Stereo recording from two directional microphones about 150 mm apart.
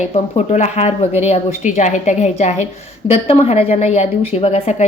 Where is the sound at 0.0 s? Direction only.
50° left (ahead or behind).